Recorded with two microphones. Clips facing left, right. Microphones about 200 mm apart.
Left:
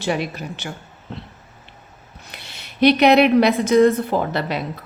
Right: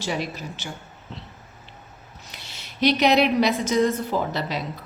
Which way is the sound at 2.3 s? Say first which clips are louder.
Left 4 dB; 60° left (ahead or behind).